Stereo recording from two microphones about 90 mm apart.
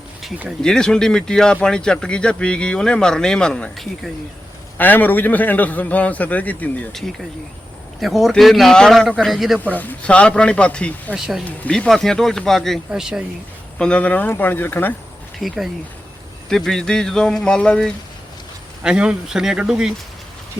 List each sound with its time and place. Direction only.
0.6 s speech: 5° left (ahead or behind)
4.8 s speech: 20° left (ahead or behind)
8.0 s a man's voice: centre (ahead or behind)
9.6 s speech: 20° left (ahead or behind)
11.1 s a man's voice: 5° right (ahead or behind)
11.7 s a man's voice: 5° left (ahead or behind)
12.9 s speech: 10° right (ahead or behind)
13.7 s speech: 10° left (ahead or behind)
15.4 s a man's voice: centre (ahead or behind)
18.8 s speech: 10° right (ahead or behind)